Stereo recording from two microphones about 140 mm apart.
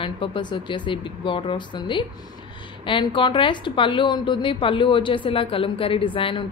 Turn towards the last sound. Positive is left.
turn(degrees=35)  # may be behind; listen again after turning